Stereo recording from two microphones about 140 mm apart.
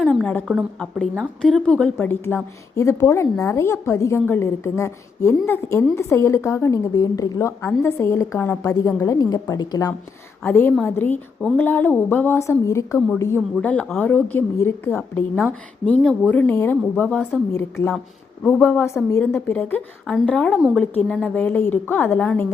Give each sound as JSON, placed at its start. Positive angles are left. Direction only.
{"t": 0.1, "sound": "a sound", "side_deg": 10}
{"t": 0.5, "sound": "a woman's voice", "side_deg": 5}
{"t": 10.4, "sound": "a woman's voice", "side_deg": 15}